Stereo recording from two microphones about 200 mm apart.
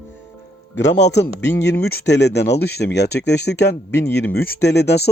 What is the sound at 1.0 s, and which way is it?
Speech, 60° left (ahead or behind).